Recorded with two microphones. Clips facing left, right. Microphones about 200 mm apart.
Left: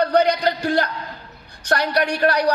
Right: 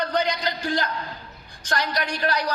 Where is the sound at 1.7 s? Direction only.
60° left (ahead or behind).